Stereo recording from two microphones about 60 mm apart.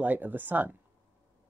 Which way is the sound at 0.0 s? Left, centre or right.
Right.